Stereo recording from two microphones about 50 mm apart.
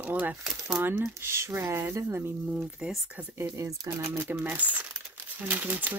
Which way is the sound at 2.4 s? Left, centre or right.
Centre.